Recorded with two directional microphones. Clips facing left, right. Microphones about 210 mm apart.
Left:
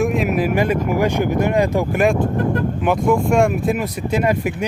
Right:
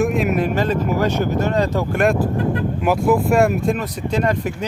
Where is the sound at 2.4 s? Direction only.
50° left (ahead or behind).